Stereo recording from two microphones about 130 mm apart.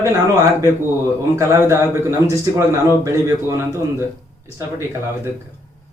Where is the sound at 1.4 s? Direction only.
25° right (ahead or behind).